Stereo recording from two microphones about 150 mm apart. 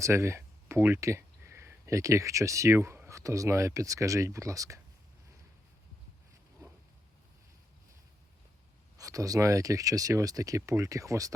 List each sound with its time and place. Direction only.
0.0 s speech: 20° right (ahead or behind)
9.0 s speech: 20° right (ahead or behind)